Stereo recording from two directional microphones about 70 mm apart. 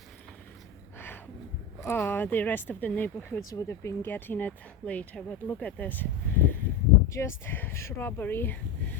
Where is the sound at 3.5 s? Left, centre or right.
Left.